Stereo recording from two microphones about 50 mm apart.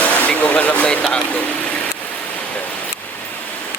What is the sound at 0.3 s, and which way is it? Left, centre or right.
Speech, left.